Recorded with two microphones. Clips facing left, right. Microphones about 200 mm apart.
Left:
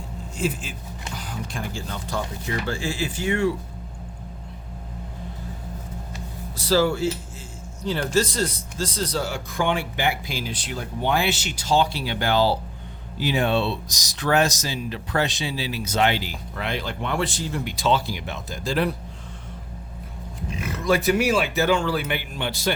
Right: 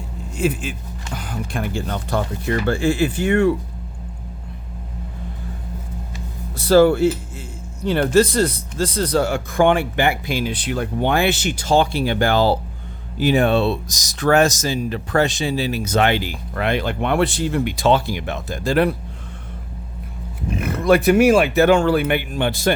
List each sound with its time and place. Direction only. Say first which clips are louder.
0.3 s speech: right 6 dB; 60° right (ahead or behind)
6.6 s speech: right 8 dB; 55° right (ahead or behind)
20.5 s speech: right 7 dB; 55° right (ahead or behind)